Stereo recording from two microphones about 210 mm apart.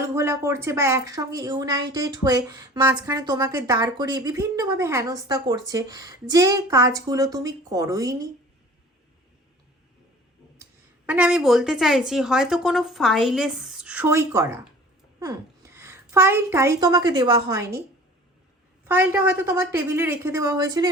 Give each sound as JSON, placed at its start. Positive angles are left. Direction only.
{"t": 0.0, "sound": "a woman's voice", "side_deg": -15}
{"t": 10.6, "sound": "a woman's voice", "side_deg": -10}
{"t": 18.9, "sound": "a woman's voice", "side_deg": -10}